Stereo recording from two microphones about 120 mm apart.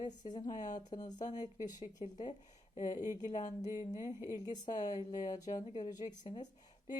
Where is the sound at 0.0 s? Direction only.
35° left (ahead or behind).